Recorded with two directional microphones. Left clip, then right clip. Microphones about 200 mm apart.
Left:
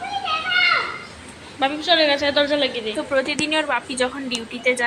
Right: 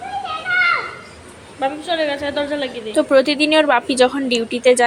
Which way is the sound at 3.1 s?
25° right (ahead or behind).